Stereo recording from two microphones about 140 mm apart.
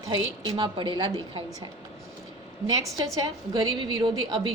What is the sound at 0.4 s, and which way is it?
Speech, 35° right (ahead or behind).